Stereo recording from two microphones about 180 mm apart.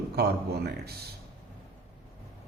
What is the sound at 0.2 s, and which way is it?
Speech, 65° right (ahead or behind).